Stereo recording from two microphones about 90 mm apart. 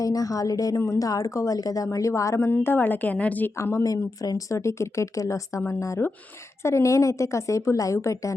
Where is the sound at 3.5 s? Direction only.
30° left (ahead or behind).